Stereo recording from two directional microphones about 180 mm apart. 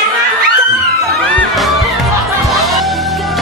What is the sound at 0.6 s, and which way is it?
Music, centre (ahead or behind).